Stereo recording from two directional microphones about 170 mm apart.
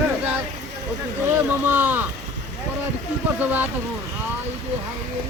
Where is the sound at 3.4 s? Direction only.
10° right (ahead or behind).